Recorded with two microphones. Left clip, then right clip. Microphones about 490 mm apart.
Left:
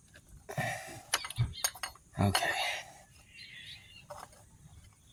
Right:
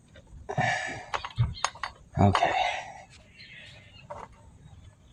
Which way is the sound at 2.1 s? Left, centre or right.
Left.